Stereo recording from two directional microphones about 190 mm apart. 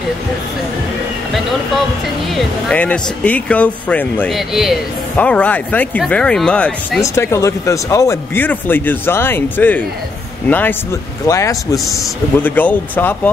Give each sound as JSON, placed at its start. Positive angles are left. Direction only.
{"t": 2.3, "sound": "speech", "side_deg": 5}
{"t": 7.0, "sound": "speech", "side_deg": 15}
{"t": 11.2, "sound": "speech", "side_deg": 15}